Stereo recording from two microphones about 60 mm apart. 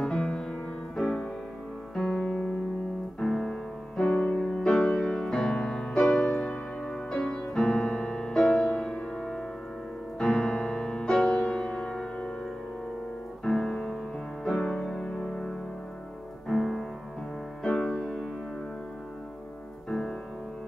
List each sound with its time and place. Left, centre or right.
0.0 s music: centre
4.6 s music: centre
6.4 s music: centre
13.4 s music: centre
19.9 s music: centre